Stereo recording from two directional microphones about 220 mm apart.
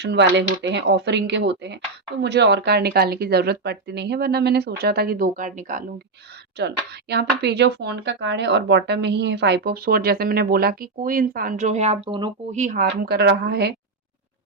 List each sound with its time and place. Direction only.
0.0 s speech: 50° right (ahead or behind)
6.6 s speech: 50° right (ahead or behind)